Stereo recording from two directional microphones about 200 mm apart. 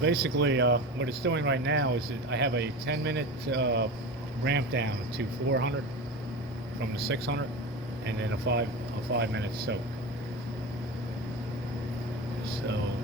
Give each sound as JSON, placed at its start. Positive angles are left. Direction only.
{"t": 0.0, "sound": "speech", "side_deg": -60}
{"t": 7.1, "sound": "speech", "side_deg": -60}